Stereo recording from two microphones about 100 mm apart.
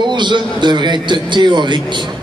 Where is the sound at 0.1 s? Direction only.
50° right (ahead or behind).